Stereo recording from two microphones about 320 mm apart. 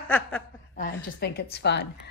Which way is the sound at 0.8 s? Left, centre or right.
Left.